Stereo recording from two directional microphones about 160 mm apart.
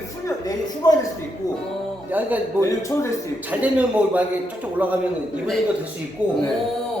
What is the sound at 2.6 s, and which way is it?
Speech, 20° left (ahead or behind).